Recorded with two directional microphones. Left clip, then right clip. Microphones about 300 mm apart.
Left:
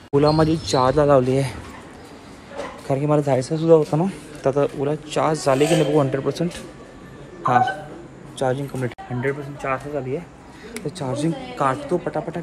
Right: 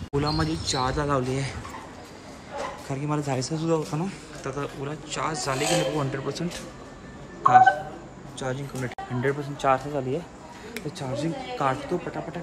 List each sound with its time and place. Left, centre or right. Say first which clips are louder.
0.1 s speech: left 10 dB; centre
2.9 s speech: left 12 dB; centre
7.4 s speech: right 2 dB; centre
9.7 s speech: right 1 dB; centre
10.9 s speech: left 6 dB; centre